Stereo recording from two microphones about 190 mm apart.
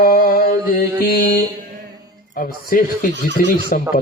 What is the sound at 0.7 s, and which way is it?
A man's voice, 50° left (ahead or behind).